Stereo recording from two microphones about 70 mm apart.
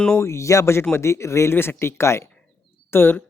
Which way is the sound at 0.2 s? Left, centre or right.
Left.